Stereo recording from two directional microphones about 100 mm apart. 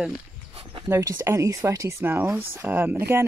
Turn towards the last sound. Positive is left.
turn(degrees=-25)  # may be behind; listen again after turning